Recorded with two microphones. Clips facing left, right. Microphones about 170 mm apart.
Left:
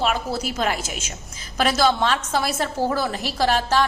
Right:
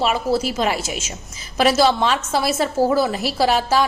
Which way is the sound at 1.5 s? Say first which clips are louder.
Right 4 dB; 5° right (ahead or behind).